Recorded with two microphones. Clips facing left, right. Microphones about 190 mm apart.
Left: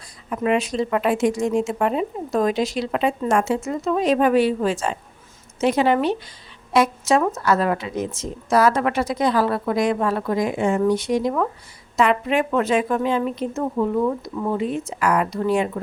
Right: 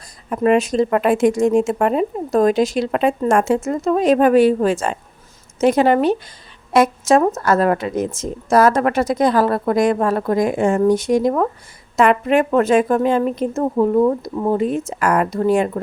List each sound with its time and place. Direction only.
0.3 s speech: 45° right (ahead or behind)